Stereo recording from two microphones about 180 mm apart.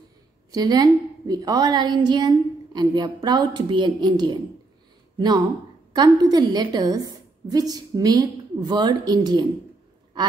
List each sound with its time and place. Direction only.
0.5 s a woman's voice: 20° right (ahead or behind)
5.9 s a woman's voice: 20° right (ahead or behind)